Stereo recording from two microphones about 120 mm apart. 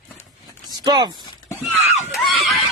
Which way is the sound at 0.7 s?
35° right (ahead or behind).